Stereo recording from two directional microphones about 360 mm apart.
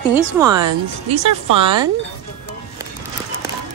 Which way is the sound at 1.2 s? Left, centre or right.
Right.